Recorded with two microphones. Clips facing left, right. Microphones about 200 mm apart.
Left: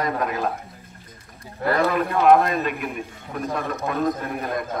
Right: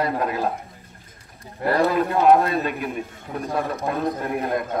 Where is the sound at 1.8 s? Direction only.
30° right (ahead or behind).